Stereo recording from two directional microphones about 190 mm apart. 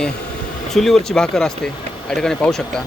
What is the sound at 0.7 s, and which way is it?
Speech, centre (ahead or behind).